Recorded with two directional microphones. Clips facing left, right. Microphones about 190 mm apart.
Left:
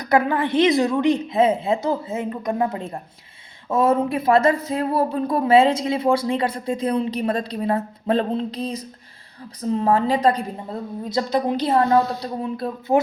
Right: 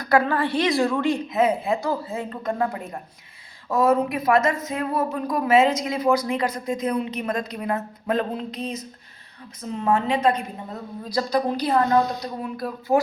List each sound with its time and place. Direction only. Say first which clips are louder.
0.0 s a woman's voice: left 1 dB; 20° left (ahead or behind)